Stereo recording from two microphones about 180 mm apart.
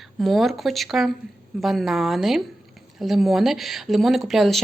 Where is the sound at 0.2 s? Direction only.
Centre (ahead or behind).